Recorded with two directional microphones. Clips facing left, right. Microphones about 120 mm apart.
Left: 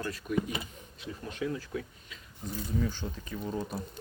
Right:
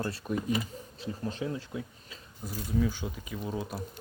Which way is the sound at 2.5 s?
5° right (ahead or behind).